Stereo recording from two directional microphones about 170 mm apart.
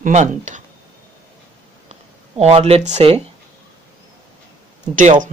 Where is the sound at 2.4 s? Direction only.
35° right (ahead or behind).